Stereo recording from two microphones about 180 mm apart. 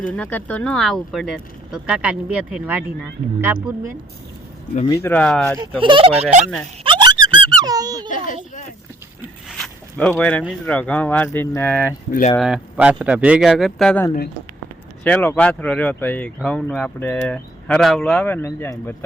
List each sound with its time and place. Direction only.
0.1 s speech: 10° left (ahead or behind); by 3.9 s 10° right (ahead or behind)
4.9 s speech: 10° left (ahead or behind)
5.8 s speech: 30° right (ahead or behind)
6.4 s speech: 5° left (ahead or behind)
6.8 s squeak: 25° right (ahead or behind)
8.1 s speech: 45° left (ahead or behind)
9.5 s zipper: centre (ahead or behind)
10.1 s speech: 5° left (ahead or behind)
12.4 s speech: 5° right (ahead or behind); by 18.9 s 15° left (ahead or behind)